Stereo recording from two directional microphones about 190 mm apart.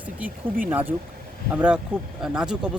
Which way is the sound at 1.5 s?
5° right (ahead or behind).